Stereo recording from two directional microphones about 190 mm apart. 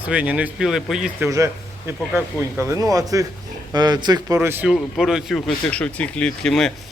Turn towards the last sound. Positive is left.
turn(degrees=0)  # may be behind; listen again after turning